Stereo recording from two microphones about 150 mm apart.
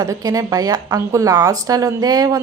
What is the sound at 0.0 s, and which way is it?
A woman's voice, 25° right (ahead or behind).